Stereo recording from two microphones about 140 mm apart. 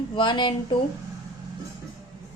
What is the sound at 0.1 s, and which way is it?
Speech, 35° left (ahead or behind).